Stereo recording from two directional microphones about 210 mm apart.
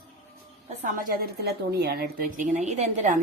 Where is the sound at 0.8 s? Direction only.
40° right (ahead or behind).